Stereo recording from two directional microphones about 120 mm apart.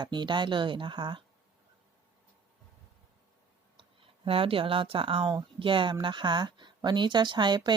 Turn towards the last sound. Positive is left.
turn(degrees=-40)  # may be behind; listen again after turning